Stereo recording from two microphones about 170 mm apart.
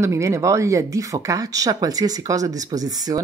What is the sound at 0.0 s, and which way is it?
Speech, 15° right (ahead or behind).